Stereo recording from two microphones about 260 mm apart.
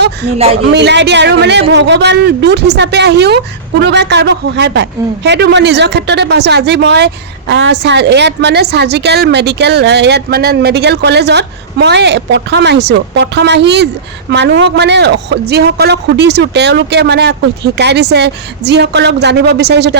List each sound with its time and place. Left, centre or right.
0.6 s a man's voice: right